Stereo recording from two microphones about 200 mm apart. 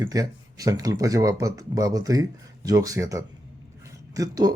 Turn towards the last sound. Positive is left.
turn(degrees=-20)  # may be behind; listen again after turning